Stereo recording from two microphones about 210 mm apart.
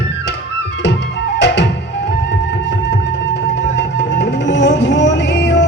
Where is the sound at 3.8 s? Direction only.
60° left (ahead or behind).